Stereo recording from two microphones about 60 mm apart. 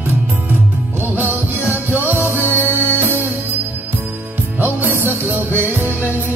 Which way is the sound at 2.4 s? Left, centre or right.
Left.